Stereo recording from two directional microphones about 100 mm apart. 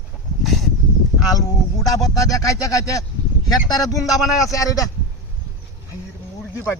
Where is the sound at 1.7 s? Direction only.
35° left (ahead or behind).